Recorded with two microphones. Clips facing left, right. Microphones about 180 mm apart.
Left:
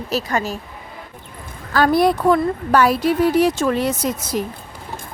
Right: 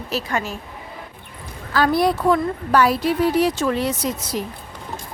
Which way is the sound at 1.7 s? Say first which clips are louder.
Left 3 dB; 50° left (ahead or behind).